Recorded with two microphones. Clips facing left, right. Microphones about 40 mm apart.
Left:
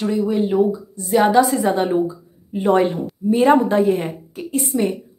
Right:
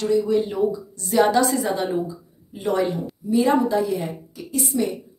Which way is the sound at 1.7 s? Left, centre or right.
Left.